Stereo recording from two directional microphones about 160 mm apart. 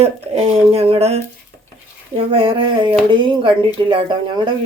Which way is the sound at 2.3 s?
35° right (ahead or behind).